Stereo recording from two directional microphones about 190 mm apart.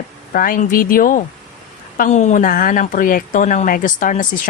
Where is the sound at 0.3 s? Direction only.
45° left (ahead or behind).